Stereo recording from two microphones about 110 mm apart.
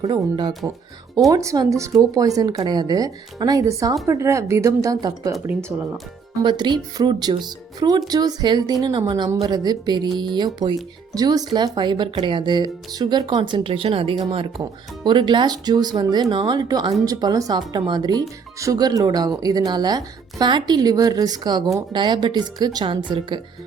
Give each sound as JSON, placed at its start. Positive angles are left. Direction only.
{"t": 0.0, "sound": "a woman's voice", "side_deg": -40}
{"t": 5.5, "sound": "a woman's voice", "side_deg": -20}
{"t": 6.4, "sound": "speech", "side_deg": -45}
{"t": 14.6, "sound": "speech", "side_deg": -45}